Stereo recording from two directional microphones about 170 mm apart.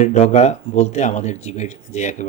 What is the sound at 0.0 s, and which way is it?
Speech, 45° left (ahead or behind).